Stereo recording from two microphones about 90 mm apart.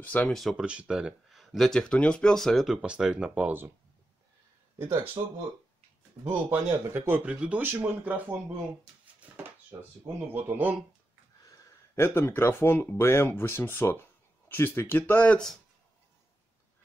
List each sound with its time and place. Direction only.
0.0 s speech: 15° left (ahead or behind)
0.3 s speech: centre (ahead or behind)
0.7 s speech: 10° right (ahead or behind)
2.8 s speech: 10° right (ahead or behind)
5.2 s speech: 50° right (ahead or behind)
6.2 s speech: 25° right (ahead or behind)
7.2 s speech: 15° right (ahead or behind)
9.3 s dishes: 20° right (ahead or behind)
10.3 s speech: 20° right (ahead or behind)
11.9 s speech: 25° left (ahead or behind)